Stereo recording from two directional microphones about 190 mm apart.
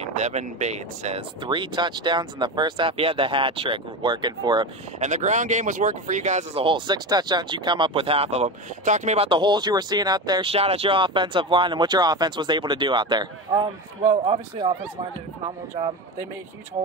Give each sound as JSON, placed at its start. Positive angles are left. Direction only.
{"t": 0.0, "sound": "speech", "side_deg": -35}
{"t": 5.0, "sound": "a man's voice", "side_deg": -40}